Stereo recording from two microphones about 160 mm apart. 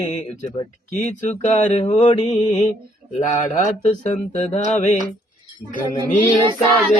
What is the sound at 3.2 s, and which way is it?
Mantra, 55° left (ahead or behind).